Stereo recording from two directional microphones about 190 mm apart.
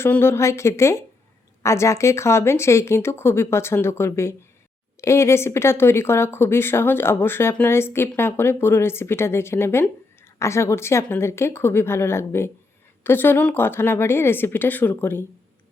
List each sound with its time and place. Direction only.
0.0 s speech: 10° left (ahead or behind)